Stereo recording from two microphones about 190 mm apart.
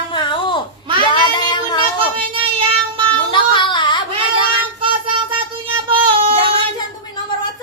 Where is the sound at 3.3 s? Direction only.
25° left (ahead or behind).